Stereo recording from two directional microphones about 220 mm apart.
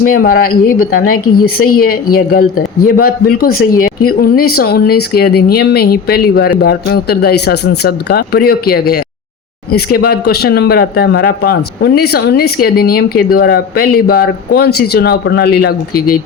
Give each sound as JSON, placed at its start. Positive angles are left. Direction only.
{"t": 0.2, "sound": "speech", "side_deg": 40}